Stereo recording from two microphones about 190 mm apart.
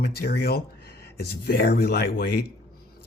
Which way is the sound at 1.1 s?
55° left (ahead or behind).